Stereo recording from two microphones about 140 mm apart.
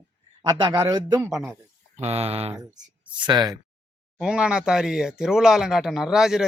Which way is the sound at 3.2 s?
30° right (ahead or behind).